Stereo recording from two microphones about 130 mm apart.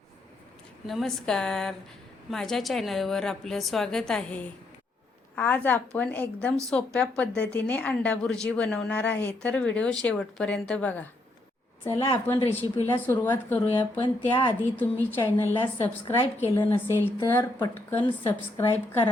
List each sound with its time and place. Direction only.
0.9 s a woman's voice: centre (ahead or behind)
11.9 s speech: 45° left (ahead or behind)
12.9 s a woman's voice: 15° left (ahead or behind)
14.0 s speech: 40° left (ahead or behind)
14.8 s a woman's voice: 15° left (ahead or behind)